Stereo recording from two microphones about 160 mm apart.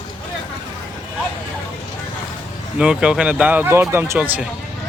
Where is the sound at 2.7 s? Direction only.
5° right (ahead or behind).